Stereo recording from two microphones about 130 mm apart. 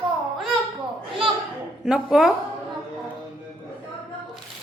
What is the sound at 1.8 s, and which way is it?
Speech, 5° right (ahead or behind).